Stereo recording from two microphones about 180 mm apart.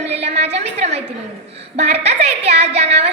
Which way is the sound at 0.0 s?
35° right (ahead or behind).